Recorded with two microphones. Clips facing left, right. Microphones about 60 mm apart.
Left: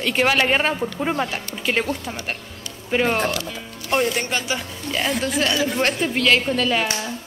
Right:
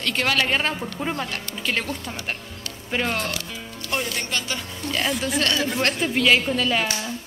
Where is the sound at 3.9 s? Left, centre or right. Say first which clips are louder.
Left 6 dB; left.